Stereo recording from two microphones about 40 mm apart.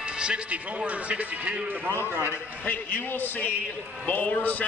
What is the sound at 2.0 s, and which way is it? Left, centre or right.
Speech, right.